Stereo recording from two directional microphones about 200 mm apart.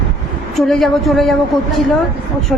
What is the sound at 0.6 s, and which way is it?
Speech, centre (ahead or behind).